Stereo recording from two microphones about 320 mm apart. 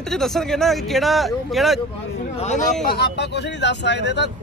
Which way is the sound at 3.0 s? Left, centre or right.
Left.